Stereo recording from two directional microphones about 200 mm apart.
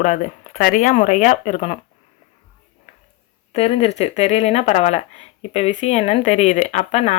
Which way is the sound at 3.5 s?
30° left (ahead or behind).